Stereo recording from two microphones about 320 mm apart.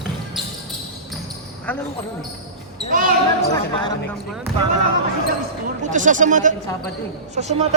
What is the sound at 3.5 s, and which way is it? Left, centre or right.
Speech, centre.